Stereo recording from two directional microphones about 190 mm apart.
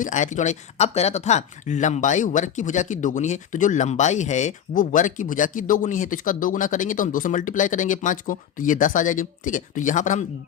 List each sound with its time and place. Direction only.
0.0 s speech: 40° left (ahead or behind)